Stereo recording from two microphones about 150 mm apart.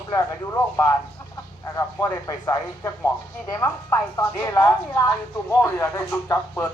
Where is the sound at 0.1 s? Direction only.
20° left (ahead or behind).